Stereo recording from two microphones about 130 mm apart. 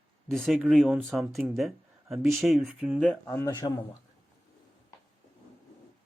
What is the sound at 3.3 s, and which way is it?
Speech, 25° left (ahead or behind).